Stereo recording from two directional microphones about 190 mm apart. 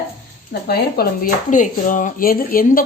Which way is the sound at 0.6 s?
55° left (ahead or behind).